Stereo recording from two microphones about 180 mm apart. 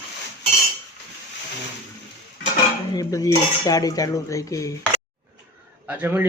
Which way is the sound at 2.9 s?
20° left (ahead or behind).